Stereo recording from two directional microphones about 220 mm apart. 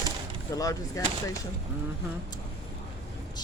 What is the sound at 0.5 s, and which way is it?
Speech, 15° left (ahead or behind).